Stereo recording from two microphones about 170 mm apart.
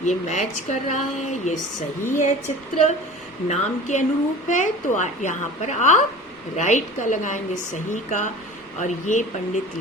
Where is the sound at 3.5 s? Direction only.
45° left (ahead or behind).